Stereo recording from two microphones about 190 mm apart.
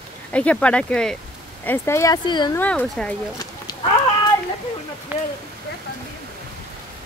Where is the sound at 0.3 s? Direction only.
5° left (ahead or behind); by 2.6 s 25° left (ahead or behind).